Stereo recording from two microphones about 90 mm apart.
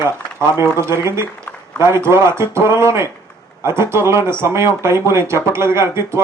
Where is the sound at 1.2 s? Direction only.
25° left (ahead or behind).